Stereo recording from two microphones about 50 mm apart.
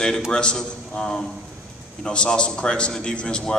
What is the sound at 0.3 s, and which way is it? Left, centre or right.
A man's voice, centre.